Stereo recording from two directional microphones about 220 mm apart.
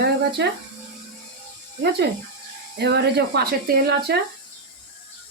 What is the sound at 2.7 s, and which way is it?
Speech, 50° right (ahead or behind).